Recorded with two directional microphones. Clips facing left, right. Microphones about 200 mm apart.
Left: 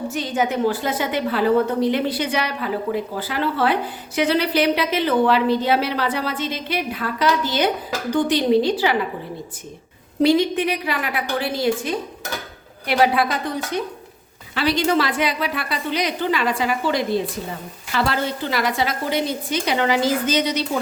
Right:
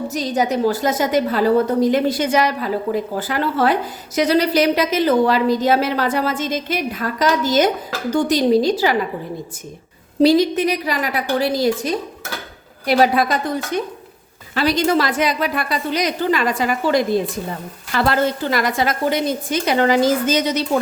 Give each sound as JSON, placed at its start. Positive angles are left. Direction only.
{"t": 0.1, "sound": "a woman's voice", "side_deg": -40}
{"t": 10.2, "sound": "a woman's voice", "side_deg": -40}
{"t": 14.5, "sound": "a woman's voice", "side_deg": -40}